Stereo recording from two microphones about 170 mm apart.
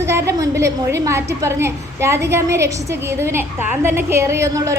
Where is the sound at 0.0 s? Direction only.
15° right (ahead or behind).